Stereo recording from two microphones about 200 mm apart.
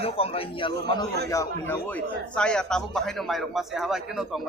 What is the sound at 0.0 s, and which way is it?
A man's voice, 30° left (ahead or behind).